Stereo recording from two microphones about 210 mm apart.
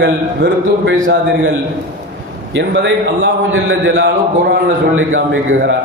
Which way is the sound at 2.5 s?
60° right (ahead or behind).